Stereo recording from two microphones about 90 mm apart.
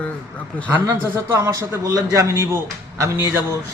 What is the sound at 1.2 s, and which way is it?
A man's voice, 35° right (ahead or behind).